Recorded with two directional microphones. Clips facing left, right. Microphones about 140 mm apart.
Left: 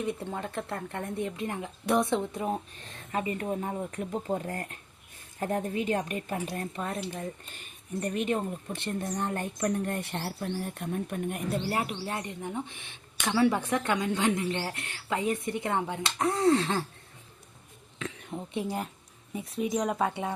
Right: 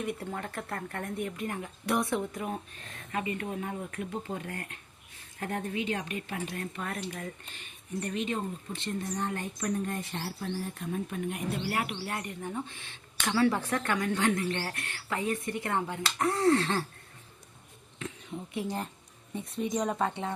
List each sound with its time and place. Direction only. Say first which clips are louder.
0.0 s speech: left 2 dB; 20° left (ahead or behind); by 6.6 s 45° left (ahead or behind)
6.6 s speech: left 3 dB; 25° left (ahead or behind)
7.5 s speech: left 1 dB; 45° left (ahead or behind)
11.7 s speech: left 2 dB; 30° left (ahead or behind)
18.0 s a sound: left 2 dB; 90° left
19.3 s speech: left 2 dB; 5° left (ahead or behind)